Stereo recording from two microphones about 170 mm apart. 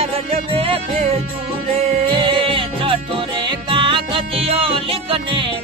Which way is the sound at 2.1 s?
30° right (ahead or behind).